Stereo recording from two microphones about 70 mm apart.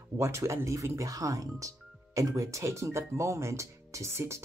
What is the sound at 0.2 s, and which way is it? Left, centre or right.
Speech, right.